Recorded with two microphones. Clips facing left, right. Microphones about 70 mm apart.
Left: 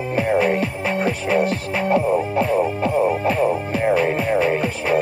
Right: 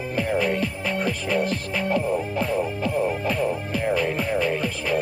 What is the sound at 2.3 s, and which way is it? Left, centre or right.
Music, left.